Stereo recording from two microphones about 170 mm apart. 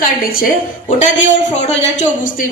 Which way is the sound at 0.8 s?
45° left (ahead or behind).